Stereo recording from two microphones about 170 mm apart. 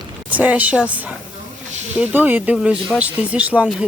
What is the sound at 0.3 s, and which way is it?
Speech, 10° right (ahead or behind).